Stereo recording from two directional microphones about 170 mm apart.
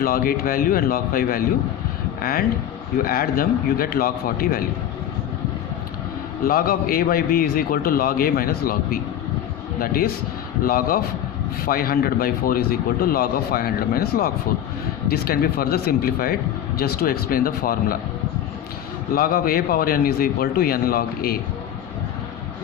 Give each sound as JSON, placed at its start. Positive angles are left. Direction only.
{"t": 0.0, "sound": "speech", "side_deg": 60}
{"t": 3.0, "sound": "speech", "side_deg": 60}
{"t": 6.4, "sound": "speech", "side_deg": 60}
{"t": 19.1, "sound": "speech", "side_deg": 60}